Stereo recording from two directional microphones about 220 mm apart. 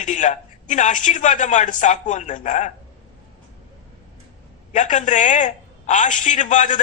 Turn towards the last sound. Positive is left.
turn(degrees=35)  # may be behind; listen again after turning